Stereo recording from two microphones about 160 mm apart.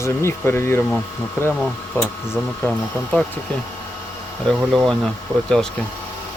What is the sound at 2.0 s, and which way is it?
Speech, 15° left (ahead or behind).